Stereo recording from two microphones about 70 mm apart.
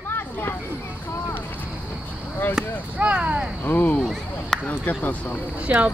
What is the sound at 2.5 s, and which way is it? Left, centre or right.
Speech, centre.